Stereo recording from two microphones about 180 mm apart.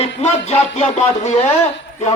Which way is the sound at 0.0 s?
40° left (ahead or behind).